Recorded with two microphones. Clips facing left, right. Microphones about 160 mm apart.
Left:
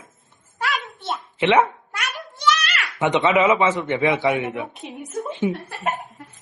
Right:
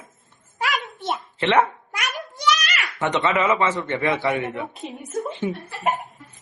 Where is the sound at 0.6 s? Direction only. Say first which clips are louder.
Right 1 dB; 10° right (ahead or behind).